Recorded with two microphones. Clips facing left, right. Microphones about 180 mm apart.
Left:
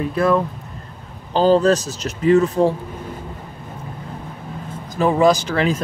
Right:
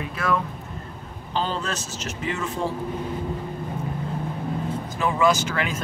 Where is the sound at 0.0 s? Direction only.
35° left (ahead or behind).